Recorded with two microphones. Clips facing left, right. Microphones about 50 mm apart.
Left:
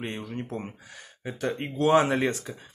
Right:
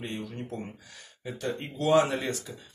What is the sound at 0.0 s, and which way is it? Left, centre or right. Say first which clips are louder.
Speech: left 2 dB; left.